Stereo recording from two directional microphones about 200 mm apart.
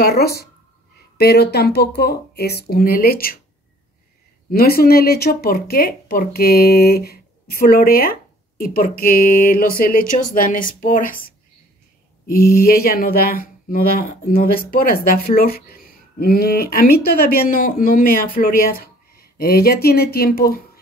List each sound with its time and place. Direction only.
0.0 s speech: 50° left (ahead or behind)
4.5 s speech: 50° left (ahead or behind)
12.3 s speech: 50° left (ahead or behind)